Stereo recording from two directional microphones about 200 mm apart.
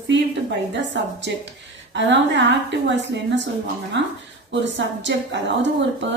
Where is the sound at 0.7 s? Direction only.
60° right (ahead or behind).